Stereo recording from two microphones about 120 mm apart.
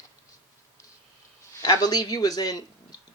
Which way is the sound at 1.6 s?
35° left (ahead or behind).